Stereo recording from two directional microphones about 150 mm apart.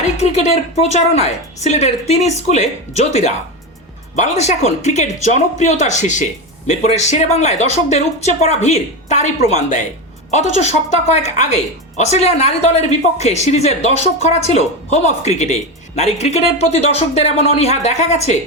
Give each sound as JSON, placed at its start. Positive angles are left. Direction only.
{"t": 0.2, "sound": "a woman's voice", "side_deg": 45}